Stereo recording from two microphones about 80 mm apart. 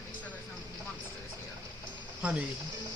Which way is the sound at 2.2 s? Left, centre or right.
Centre.